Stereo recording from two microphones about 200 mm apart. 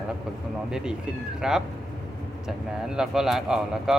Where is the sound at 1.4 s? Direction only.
5° right (ahead or behind).